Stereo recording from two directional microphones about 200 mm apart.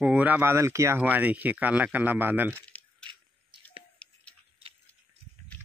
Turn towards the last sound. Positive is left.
turn(degrees=-25)  # may be behind; listen again after turning